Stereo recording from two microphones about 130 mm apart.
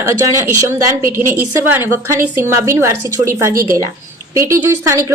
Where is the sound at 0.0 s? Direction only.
25° right (ahead or behind).